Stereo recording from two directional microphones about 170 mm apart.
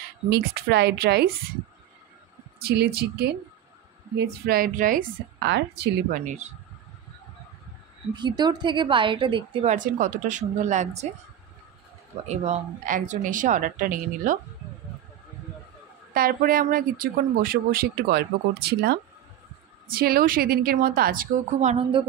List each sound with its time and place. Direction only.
0.3 s speech: 70° right (ahead or behind)
2.6 s speech: 70° right (ahead or behind); by 5.0 s 55° right (ahead or behind)
5.4 s a woman's voice: 80° right
6.2 s speech: 45° right (ahead or behind)
8.1 s a woman's voice: 25° right (ahead or behind)
9.7 s speech: 50° right (ahead or behind)
12.4 s speech: 45° right (ahead or behind)
16.1 s speech: 60° right (ahead or behind); by 22.0 s 40° right (ahead or behind)